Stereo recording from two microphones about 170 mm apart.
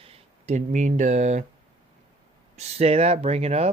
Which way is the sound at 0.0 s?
35° right (ahead or behind).